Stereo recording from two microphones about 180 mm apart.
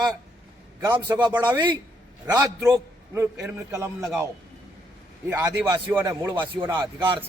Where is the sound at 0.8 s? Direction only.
25° right (ahead or behind).